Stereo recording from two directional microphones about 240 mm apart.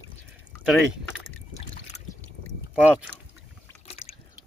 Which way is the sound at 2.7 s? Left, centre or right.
Centre.